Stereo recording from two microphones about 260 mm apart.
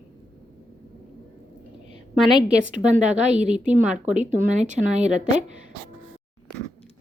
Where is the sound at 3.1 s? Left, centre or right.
Right.